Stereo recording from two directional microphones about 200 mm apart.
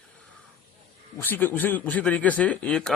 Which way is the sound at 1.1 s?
10° left (ahead or behind).